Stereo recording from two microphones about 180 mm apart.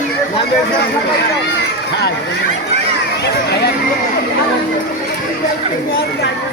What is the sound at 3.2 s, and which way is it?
Speech, 70° left (ahead or behind).